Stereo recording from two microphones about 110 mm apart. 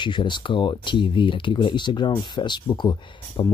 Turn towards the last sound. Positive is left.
turn(degrees=40)  # may be behind; listen again after turning